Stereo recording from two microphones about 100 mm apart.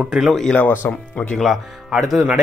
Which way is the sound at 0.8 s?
20° left (ahead or behind).